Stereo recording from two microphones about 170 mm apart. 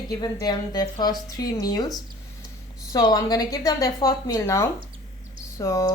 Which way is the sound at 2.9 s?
20° left (ahead or behind).